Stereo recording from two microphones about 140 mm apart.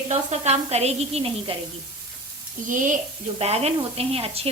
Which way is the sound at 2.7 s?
65° right (ahead or behind).